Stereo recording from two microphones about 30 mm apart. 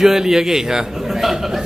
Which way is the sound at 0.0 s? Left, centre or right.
Centre.